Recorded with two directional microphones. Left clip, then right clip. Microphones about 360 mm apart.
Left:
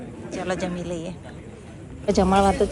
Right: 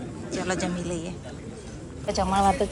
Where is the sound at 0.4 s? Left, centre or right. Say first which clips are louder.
Left 2 dB; centre.